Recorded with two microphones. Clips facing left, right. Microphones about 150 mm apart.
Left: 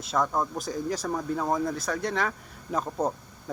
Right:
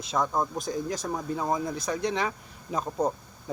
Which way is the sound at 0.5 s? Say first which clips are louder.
Even; 5° left (ahead or behind).